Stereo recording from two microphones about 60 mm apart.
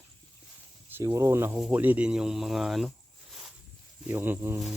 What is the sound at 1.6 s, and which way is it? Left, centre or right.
Speech, right.